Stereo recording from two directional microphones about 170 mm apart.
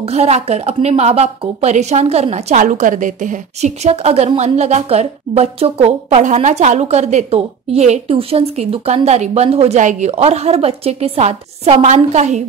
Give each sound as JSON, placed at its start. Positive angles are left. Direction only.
{"t": 0.1, "sound": "a woman's voice", "side_deg": -40}